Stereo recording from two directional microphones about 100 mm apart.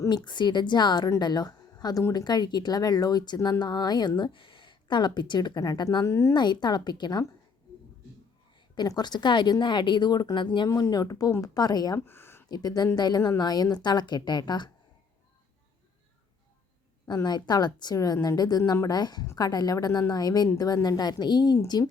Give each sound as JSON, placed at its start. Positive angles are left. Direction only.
{"t": 0.1, "sound": "speech", "side_deg": 50}
{"t": 6.3, "sound": "speech", "side_deg": 45}
{"t": 8.5, "sound": "a sound", "side_deg": 50}
{"t": 8.9, "sound": "speech", "side_deg": 45}
{"t": 10.7, "sound": "speech", "side_deg": 35}
{"t": 11.9, "sound": "a sound", "side_deg": 20}
{"t": 12.5, "sound": "speech", "side_deg": 40}
{"t": 17.2, "sound": "speech", "side_deg": 45}